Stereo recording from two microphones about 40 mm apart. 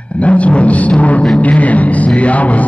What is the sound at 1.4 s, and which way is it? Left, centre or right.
A man's voice, left.